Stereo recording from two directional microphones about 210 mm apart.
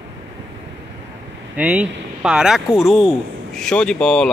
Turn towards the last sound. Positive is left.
turn(degrees=5)  # may be behind; listen again after turning